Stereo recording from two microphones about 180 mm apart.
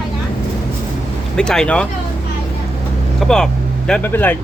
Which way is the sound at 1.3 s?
5° left (ahead or behind).